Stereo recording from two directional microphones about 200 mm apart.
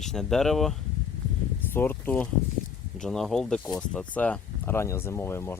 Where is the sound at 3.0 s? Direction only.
Centre (ahead or behind).